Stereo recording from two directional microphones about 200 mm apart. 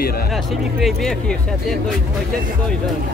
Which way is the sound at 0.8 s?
Centre (ahead or behind).